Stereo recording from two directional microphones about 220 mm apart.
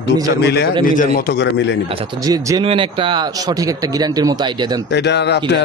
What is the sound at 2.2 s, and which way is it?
Speech, 15° right (ahead or behind).